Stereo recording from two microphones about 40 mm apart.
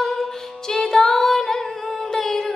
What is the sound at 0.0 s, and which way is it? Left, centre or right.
Music, centre.